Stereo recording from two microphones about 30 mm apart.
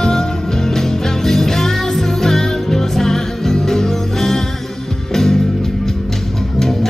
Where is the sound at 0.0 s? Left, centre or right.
Left.